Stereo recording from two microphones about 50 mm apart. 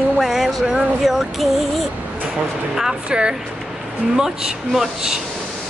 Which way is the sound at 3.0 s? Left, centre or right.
Centre.